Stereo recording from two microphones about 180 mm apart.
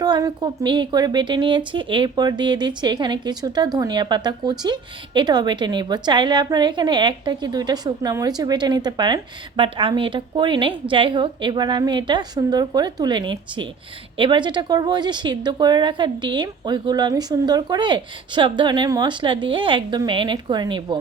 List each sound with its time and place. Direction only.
0.0 s a woman's voice: 20° right (ahead or behind)